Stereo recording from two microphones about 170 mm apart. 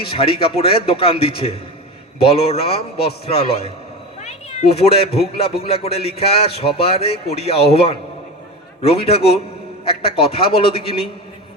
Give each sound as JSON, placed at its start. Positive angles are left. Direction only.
{"t": 0.0, "sound": "a man's voice", "side_deg": 30}
{"t": 4.2, "sound": "a sound", "side_deg": 40}
{"t": 5.4, "sound": "a man's voice", "side_deg": 35}